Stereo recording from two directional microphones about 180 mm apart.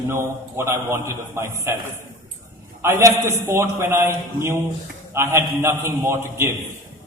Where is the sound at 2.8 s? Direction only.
15° right (ahead or behind).